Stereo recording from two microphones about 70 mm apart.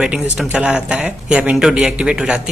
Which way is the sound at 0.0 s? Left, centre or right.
Centre.